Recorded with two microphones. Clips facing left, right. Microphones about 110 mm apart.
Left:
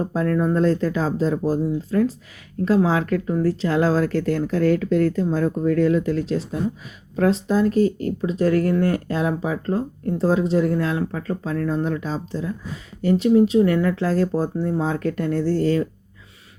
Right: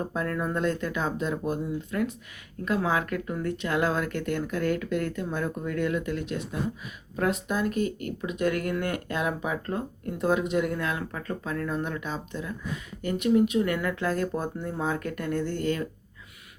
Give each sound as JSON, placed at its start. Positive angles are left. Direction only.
{"t": 0.0, "sound": "speech", "side_deg": 30}